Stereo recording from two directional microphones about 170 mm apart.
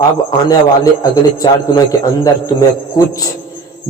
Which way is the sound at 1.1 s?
20° left (ahead or behind).